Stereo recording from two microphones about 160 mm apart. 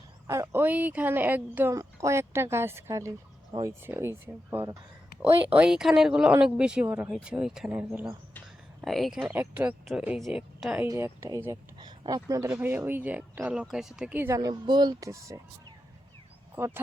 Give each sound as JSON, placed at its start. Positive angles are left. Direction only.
{"t": 0.3, "sound": "speech", "side_deg": -15}
{"t": 5.5, "sound": "speech", "side_deg": -5}
{"t": 9.2, "sound": "a woman's voice", "side_deg": -15}
{"t": 10.8, "sound": "speech", "side_deg": -15}
{"t": 11.8, "sound": "speech", "side_deg": -25}
{"t": 16.6, "sound": "speech", "side_deg": -15}